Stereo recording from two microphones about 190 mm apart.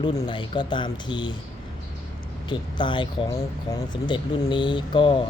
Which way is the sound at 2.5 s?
25° left (ahead or behind).